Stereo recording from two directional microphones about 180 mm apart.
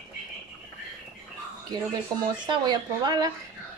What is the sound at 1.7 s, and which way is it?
Speech, 25° right (ahead or behind).